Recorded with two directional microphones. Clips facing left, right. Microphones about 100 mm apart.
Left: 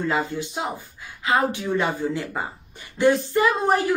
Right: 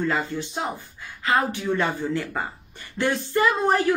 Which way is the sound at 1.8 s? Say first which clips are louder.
Left 1 dB; 10° left (ahead or behind).